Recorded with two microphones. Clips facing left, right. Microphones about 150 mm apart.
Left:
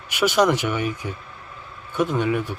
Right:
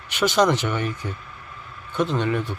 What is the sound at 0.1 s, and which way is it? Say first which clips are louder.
Speech: left 1 dB; 10° left (ahead or behind).